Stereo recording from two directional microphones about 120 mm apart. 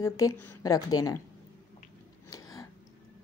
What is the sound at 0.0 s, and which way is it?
A woman's voice, 30° left (ahead or behind).